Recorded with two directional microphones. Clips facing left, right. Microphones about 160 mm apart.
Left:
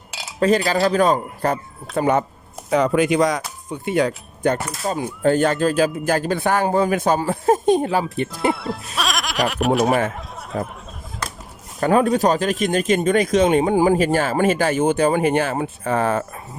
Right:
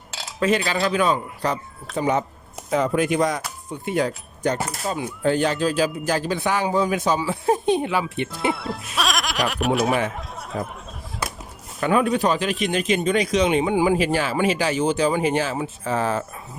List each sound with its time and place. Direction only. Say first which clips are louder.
0.3 s speech: left 4 dB; 40° left (ahead or behind); by 2.2 s 55° left (ahead or behind)
2.6 s speech: left 3 dB; 75° left (ahead or behind)
4.9 s speech: left 4 dB; 45° left (ahead or behind)
8.3 s speech: left 3 dB; centre (ahead or behind)
9.0 s goat: left 1 dB; centre (ahead or behind)
9.8 s speech: left 4 dB; 50° left (ahead or behind)
11.8 s speech: left 3 dB; 40° left (ahead or behind); by 16.2 s 55° left (ahead or behind)